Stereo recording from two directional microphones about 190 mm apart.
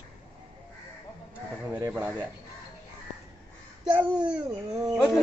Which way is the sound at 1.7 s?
10° right (ahead or behind).